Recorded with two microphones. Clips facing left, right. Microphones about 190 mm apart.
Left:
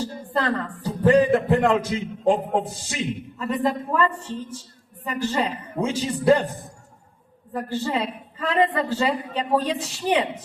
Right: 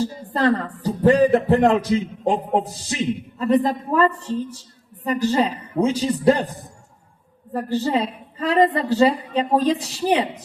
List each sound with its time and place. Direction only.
0.0 s a woman's voice: 35° right (ahead or behind)